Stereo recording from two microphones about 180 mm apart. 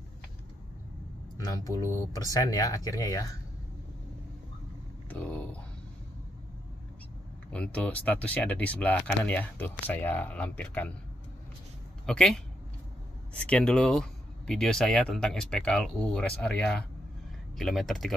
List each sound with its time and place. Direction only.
1.5 s speech: 15° left (ahead or behind)
5.2 s speech: 10° left (ahead or behind)
7.5 s speech: 5° left (ahead or behind)
12.1 s speech: 5° left (ahead or behind)